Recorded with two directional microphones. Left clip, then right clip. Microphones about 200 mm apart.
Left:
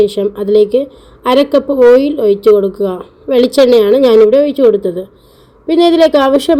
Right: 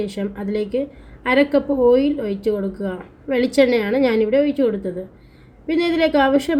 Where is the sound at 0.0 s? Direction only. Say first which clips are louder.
Left 14 dB; 30° left (ahead or behind).